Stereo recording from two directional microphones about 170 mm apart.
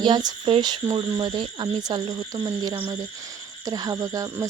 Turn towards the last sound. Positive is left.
turn(degrees=-20)  # may be behind; listen again after turning